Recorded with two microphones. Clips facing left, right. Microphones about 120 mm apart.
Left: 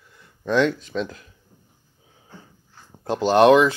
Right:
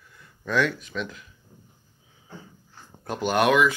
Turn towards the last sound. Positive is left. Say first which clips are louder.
# left 6 dB
turn(degrees=30)  # may be behind; listen again after turning